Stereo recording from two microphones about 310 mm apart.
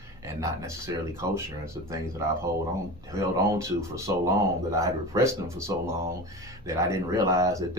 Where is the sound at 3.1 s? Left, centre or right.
Centre.